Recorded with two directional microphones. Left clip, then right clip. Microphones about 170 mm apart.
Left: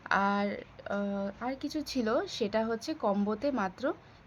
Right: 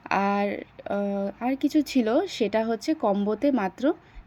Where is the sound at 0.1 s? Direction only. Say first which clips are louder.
Right 4 dB; 30° right (ahead or behind).